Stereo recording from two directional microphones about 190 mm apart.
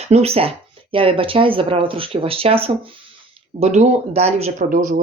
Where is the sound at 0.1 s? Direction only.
30° right (ahead or behind).